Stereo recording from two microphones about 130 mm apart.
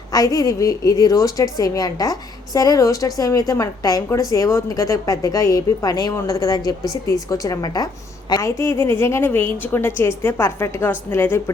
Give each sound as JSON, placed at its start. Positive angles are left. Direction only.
{"t": 0.1, "sound": "a woman's voice", "side_deg": 30}